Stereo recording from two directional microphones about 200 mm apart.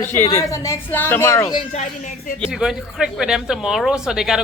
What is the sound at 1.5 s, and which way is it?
Speech, 35° left (ahead or behind).